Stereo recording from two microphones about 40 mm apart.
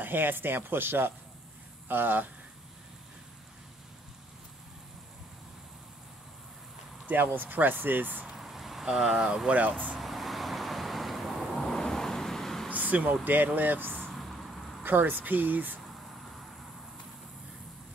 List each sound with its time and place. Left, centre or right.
0.0 s speech: right
7.1 s speech: right
8.4 s vehicle: centre
9.5 s speech: right
9.9 s vehicle: centre
11.6 s vehicle: centre
12.7 s a sound: right
13.2 s speech: right
14.1 s vehicle: centre
14.9 s speech: right